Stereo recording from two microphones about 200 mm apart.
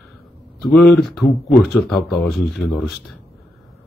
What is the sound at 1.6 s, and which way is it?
Speech, centre (ahead or behind).